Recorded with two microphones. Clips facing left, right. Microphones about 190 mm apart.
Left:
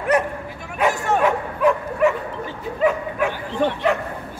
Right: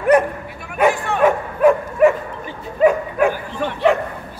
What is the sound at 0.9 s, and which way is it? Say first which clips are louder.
Bow-wow: left 2 dB; 45° left (ahead or behind).